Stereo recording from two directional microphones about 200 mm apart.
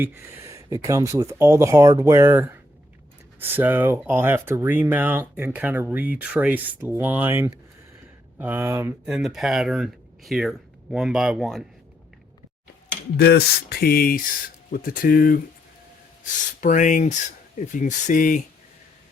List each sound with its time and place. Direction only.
0.0 s speech: 10° right (ahead or behind)
13.1 s speech: 50° left (ahead or behind)